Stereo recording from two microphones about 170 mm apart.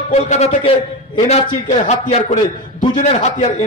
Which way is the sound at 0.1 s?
40° left (ahead or behind).